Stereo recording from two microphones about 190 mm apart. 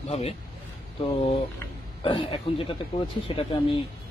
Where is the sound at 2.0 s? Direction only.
25° left (ahead or behind).